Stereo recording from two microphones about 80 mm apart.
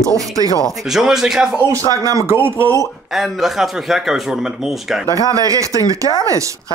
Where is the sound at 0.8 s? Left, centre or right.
Centre.